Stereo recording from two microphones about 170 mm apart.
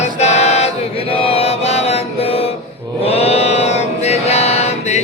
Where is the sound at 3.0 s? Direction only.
40° left (ahead or behind).